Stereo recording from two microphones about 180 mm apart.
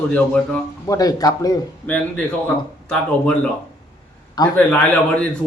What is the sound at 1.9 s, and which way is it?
Speech, 10° left (ahead or behind).